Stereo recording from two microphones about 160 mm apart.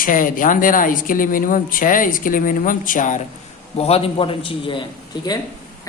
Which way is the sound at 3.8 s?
40° left (ahead or behind).